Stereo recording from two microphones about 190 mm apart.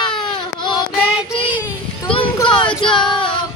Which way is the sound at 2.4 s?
25° left (ahead or behind).